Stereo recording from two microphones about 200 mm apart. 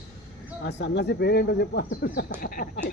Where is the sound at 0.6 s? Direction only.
60° left (ahead or behind).